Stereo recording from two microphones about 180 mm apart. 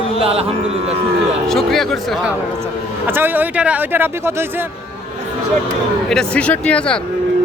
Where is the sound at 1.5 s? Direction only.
Centre (ahead or behind).